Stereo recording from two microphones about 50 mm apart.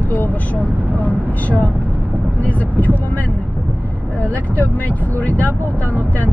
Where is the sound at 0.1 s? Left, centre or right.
Left.